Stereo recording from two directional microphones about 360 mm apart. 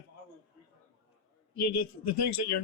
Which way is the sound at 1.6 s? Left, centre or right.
Left.